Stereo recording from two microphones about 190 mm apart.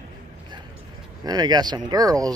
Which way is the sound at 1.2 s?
20° right (ahead or behind).